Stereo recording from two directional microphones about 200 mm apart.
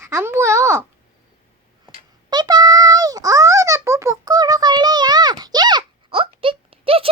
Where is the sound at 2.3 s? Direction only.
20° right (ahead or behind).